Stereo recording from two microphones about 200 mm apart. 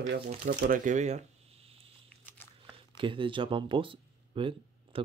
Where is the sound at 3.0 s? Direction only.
25° right (ahead or behind).